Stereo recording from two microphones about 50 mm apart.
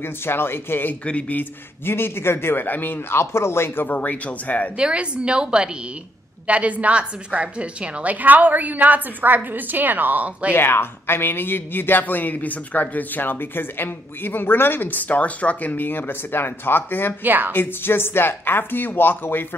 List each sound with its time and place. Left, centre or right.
0.0 s speech: left
1.0 s speech: left
1.4 s speech: left
2.6 s speech: left
3.2 s speech: left
3.8 s speech: left
4.7 s a woman's voice: right
10.5 s speech: left
17.2 s a woman's voice: right
17.5 s speech: left